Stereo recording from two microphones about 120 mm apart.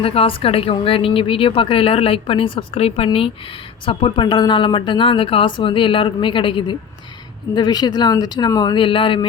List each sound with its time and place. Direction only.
0.0 s speech: 50° left (ahead or behind)
7.5 s speech: 35° left (ahead or behind)